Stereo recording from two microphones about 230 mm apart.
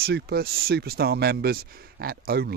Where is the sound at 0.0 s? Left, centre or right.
Right.